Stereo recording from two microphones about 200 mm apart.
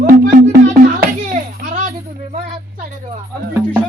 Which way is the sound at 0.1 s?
40° right (ahead or behind).